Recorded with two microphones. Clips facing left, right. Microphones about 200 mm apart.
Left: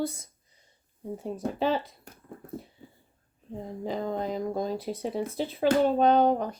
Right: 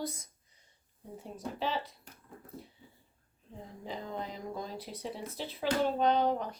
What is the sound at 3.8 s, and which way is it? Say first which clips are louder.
Speech: left 9 dB; 45° left (ahead or behind).